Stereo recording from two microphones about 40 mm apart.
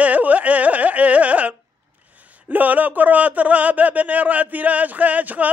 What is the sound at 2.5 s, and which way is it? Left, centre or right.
A man's voice, right.